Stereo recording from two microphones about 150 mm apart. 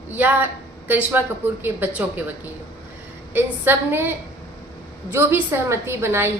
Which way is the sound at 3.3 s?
15° right (ahead or behind).